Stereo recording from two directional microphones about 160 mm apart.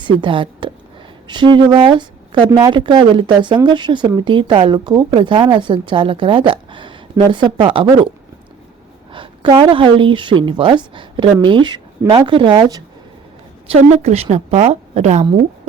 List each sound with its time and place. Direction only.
0.0 s speech: 30° right (ahead or behind)
9.1 s speech: 30° right (ahead or behind)
13.7 s speech: 40° right (ahead or behind)